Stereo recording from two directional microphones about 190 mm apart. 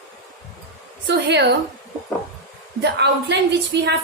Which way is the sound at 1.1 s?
65° right (ahead or behind).